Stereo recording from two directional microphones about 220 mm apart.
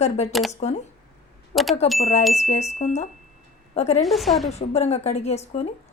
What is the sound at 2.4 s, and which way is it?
A woman's voice, 30° left (ahead or behind).